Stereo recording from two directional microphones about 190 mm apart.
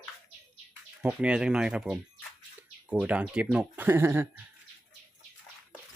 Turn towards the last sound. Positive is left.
turn(degrees=-10)  # may be behind; listen again after turning